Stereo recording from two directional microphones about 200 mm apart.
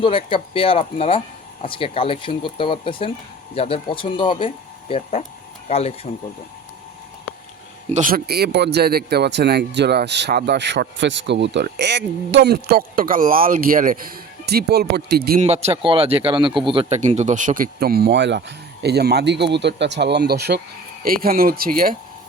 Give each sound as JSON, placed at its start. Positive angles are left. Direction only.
{"t": 0.0, "sound": "speech", "side_deg": 25}
{"t": 7.9, "sound": "speech", "side_deg": -45}
{"t": 15.4, "sound": "speech", "side_deg": -35}